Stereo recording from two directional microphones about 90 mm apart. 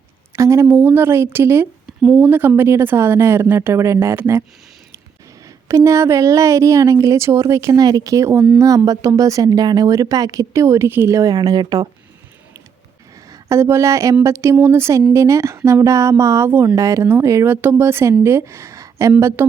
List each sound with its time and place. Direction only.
0.3 s speech: 35° right (ahead or behind)
5.6 s a woman's voice: 35° right (ahead or behind)
11.2 s speech: 45° right (ahead or behind)
13.3 s a woman's voice: 30° right (ahead or behind)
16.5 s speech: 20° right (ahead or behind)
16.7 s a woman's voice: 35° right (ahead or behind)